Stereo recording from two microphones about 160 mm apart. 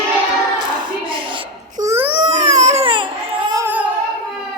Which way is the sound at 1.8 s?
15° right (ahead or behind).